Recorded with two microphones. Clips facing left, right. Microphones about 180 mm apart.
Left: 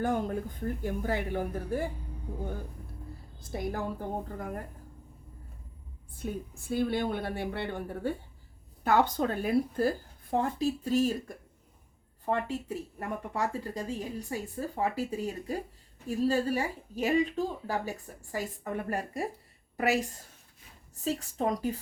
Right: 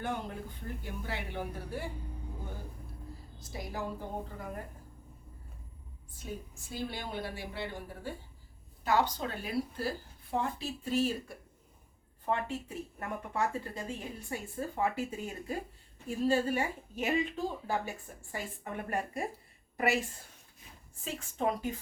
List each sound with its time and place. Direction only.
0.0 s speech: 45° left (ahead or behind)
3.4 s speech: 55° left (ahead or behind)
6.1 s a woman's voice: 55° left (ahead or behind); by 21.8 s 35° left (ahead or behind)